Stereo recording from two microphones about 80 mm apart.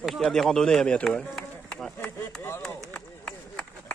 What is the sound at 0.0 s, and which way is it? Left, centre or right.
A man's voice, centre.